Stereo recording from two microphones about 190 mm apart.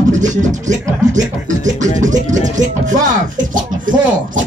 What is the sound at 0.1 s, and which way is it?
Speech, 40° right (ahead or behind).